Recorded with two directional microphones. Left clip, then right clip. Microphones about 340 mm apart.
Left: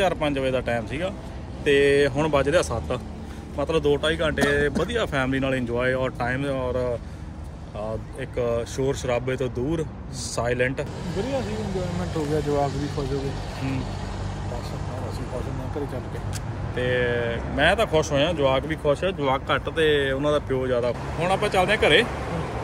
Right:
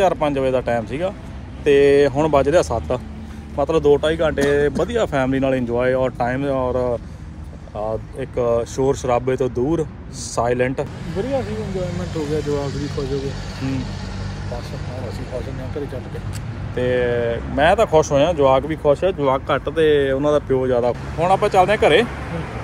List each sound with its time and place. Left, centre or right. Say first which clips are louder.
0.0 s speech: right 6 dB; centre
8.2 s speech: right 6 dB; centre
12.1 s speech: right 2 dB; left
16.7 s speech: right 5 dB; centre
22.0 s speech: right 2 dB; left